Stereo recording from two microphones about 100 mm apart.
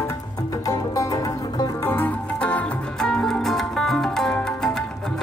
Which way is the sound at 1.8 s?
20° left (ahead or behind).